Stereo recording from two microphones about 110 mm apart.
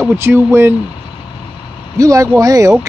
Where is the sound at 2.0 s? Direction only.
30° right (ahead or behind).